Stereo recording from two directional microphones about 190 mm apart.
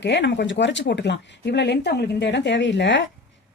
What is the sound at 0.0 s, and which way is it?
Speech, 65° left (ahead or behind).